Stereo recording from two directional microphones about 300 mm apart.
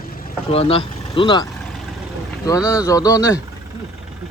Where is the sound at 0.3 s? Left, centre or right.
Centre.